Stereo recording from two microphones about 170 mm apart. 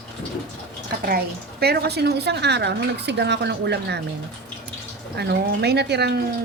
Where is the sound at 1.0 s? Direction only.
65° right (ahead or behind); by 4.0 s 85° right.